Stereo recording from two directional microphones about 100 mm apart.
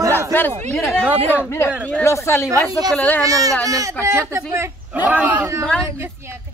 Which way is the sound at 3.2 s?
35° right (ahead or behind).